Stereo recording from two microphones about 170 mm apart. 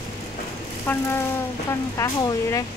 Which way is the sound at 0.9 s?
10° left (ahead or behind).